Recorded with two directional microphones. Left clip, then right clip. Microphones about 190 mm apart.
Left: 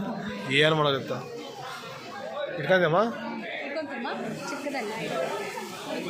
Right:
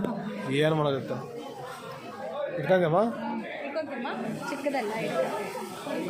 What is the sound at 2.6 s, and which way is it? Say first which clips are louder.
Speech: left 1 dB; 5° right (ahead or behind).